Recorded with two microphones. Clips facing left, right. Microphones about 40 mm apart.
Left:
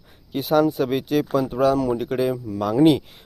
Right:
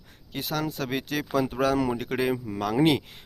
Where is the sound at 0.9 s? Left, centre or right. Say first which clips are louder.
Left 8 dB; centre.